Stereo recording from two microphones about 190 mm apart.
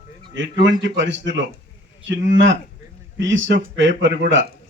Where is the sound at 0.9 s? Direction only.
75° right (ahead or behind).